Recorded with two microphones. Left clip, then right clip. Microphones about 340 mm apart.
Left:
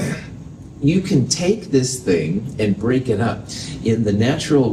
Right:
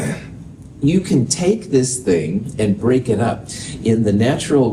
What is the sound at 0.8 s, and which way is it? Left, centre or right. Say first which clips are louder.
Speech: right 1 dB; right.